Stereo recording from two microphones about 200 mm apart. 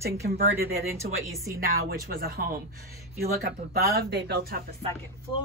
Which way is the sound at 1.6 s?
50° right (ahead or behind).